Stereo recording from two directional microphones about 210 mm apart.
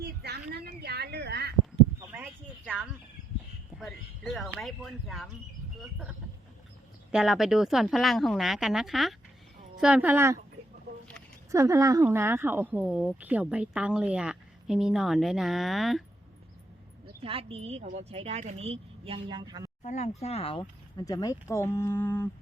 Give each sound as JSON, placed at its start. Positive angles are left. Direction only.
{"t": 0.0, "sound": "a sound", "side_deg": -50}
{"t": 2.0, "sound": "a sound", "side_deg": -10}
{"t": 3.8, "sound": "speech", "side_deg": 0}
{"t": 11.5, "sound": "speech", "side_deg": -15}
{"t": 17.2, "sound": "a woman's voice", "side_deg": -25}
{"t": 19.8, "sound": "speech", "side_deg": 35}